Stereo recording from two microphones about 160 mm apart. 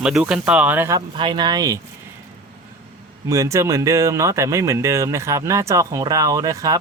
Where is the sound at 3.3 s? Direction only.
20° right (ahead or behind).